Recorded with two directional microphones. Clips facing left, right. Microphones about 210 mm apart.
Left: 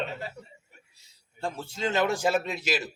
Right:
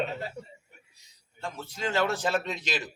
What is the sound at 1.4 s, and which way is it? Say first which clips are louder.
A man's voice: left 3 dB; 30° left (ahead or behind).